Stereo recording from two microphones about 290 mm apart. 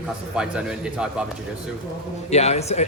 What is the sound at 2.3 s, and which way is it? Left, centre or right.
Speech, left.